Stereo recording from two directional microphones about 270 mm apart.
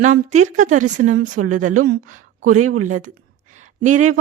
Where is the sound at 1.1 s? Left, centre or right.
Right.